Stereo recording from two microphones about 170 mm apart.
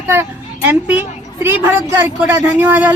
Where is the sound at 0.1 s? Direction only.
10° right (ahead or behind).